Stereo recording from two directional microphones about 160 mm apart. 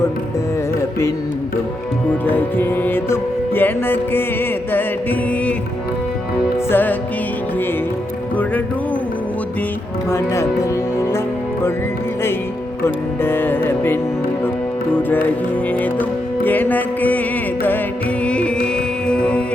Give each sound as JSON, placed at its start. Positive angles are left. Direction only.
{"t": 2.2, "sound": "music", "side_deg": 10}
{"t": 6.7, "sound": "music", "side_deg": 10}
{"t": 10.1, "sound": "speech", "side_deg": 15}
{"t": 12.8, "sound": "music", "side_deg": 15}
{"t": 18.3, "sound": "music", "side_deg": 5}